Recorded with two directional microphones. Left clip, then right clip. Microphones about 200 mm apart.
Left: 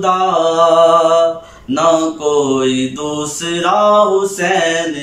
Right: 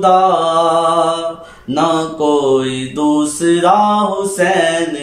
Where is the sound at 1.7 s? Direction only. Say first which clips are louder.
Left 2 dB; 25° right (ahead or behind).